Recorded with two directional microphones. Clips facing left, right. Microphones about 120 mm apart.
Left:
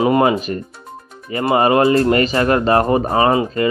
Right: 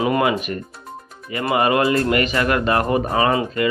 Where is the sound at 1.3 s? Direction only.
30° left (ahead or behind).